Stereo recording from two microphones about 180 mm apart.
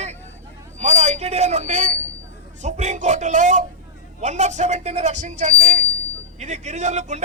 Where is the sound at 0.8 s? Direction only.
40° right (ahead or behind).